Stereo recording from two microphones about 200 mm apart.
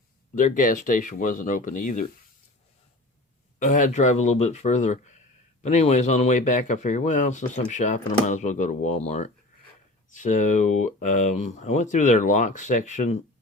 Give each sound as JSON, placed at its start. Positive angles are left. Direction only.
{"t": 0.3, "sound": "speech", "side_deg": 40}
{"t": 3.6, "sound": "speech", "side_deg": 40}